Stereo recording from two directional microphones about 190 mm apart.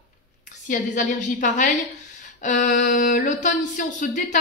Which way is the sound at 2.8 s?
45° left (ahead or behind).